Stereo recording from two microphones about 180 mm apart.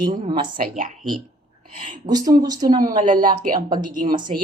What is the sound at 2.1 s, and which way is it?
Speech, 20° right (ahead or behind).